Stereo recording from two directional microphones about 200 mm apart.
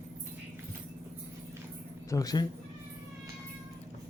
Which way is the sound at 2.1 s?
20° left (ahead or behind).